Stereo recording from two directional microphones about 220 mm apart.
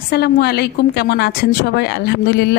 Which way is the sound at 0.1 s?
45° left (ahead or behind).